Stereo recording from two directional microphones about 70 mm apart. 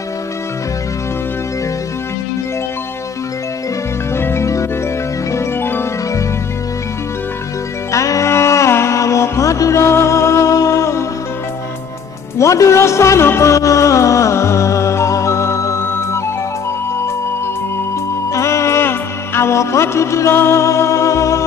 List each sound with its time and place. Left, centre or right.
4.2 s music: left
7.9 s music: left
12.4 s music: left
18.3 s music: left